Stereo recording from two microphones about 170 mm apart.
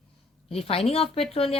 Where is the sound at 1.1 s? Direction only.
35° left (ahead or behind).